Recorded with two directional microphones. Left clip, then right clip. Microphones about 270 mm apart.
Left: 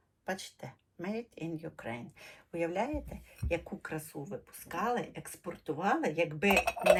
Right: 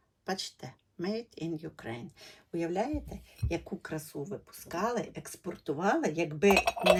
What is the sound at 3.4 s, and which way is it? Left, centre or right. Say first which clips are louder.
Speech: left 1 dB; centre.